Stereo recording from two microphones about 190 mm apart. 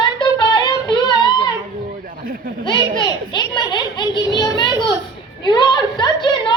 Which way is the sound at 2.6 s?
25° left (ahead or behind).